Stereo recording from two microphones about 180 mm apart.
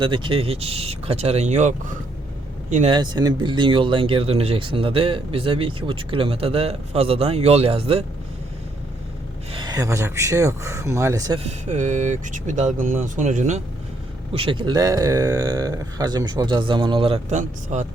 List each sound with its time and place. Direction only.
0.0 s speech: 25° right (ahead or behind); by 2.9 s 45° right (ahead or behind)
2.9 s speech: 25° right (ahead or behind)
9.5 s speech: 25° right (ahead or behind)
11.4 s speech: 40° right (ahead or behind)
14.3 s speech: 30° right (ahead or behind)
17.3 s speech: 40° right (ahead or behind)